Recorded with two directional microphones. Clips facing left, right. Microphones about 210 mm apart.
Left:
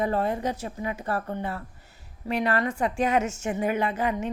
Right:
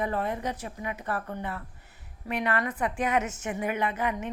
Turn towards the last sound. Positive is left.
turn(degrees=30)  # may be behind; listen again after turning